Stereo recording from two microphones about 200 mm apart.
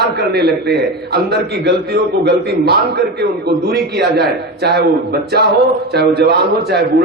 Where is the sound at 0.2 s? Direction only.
55° right (ahead or behind).